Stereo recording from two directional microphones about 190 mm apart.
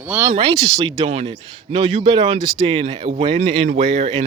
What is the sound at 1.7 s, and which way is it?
Speech, 35° right (ahead or behind).